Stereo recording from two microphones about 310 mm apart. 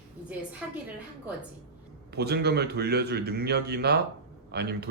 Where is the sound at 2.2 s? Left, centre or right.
Right.